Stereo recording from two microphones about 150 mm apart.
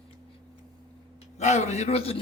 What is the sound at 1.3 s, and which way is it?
Speech, 50° left (ahead or behind).